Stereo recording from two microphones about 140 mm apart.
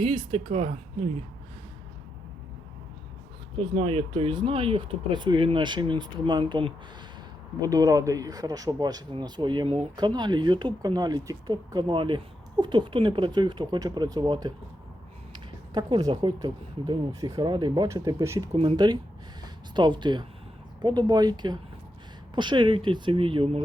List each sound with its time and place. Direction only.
0.0 s speech: 40° right (ahead or behind)
3.6 s speech: 40° right (ahead or behind)
7.6 s speech: 25° right (ahead or behind)
17.8 s speech: 25° right (ahead or behind)
18.5 s speech: 45° right (ahead or behind)
19.7 s speech: 35° right (ahead or behind)